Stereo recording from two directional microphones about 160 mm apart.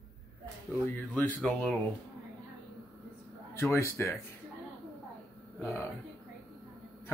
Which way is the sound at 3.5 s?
15° left (ahead or behind).